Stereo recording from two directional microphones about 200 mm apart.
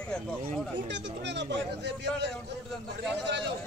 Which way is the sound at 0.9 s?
60° right (ahead or behind).